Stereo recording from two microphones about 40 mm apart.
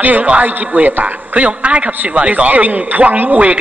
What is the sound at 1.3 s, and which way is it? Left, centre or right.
A woman's voice, right.